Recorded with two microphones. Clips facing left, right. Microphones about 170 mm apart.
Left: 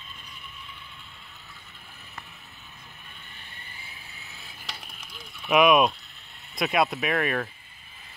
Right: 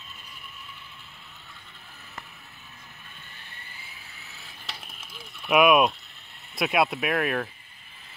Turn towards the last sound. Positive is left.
turn(degrees=-5)  # may be behind; listen again after turning